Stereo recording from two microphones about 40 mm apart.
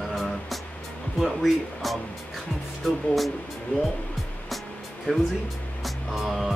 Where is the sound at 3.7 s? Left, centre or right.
Left.